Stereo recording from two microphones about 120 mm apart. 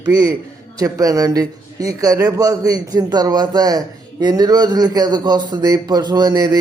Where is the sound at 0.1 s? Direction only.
30° right (ahead or behind).